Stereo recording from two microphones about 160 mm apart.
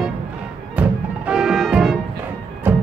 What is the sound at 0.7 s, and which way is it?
Music, 5° right (ahead or behind).